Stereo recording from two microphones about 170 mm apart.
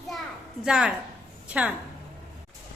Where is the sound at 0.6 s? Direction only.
5° right (ahead or behind).